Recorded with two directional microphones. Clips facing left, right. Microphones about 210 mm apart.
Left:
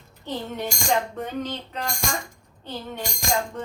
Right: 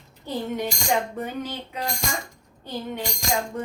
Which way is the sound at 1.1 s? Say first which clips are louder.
Left 1 dB; 10° right (ahead or behind).